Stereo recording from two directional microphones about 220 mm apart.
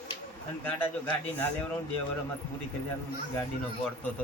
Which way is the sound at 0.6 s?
10° left (ahead or behind).